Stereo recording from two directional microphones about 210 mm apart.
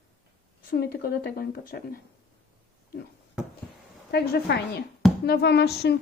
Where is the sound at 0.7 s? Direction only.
50° left (ahead or behind).